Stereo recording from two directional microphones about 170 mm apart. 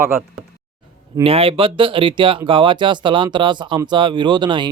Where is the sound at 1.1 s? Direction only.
35° right (ahead or behind).